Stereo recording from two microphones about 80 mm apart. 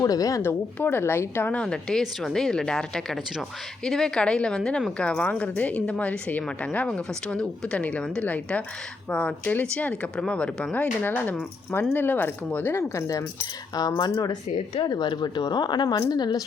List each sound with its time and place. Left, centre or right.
0.0 s a woman's voice: left
0.4 s speech: left
1.5 s a woman's voice: centre
12.7 s speech: left
13.4 s speech: left
14.8 s speech: left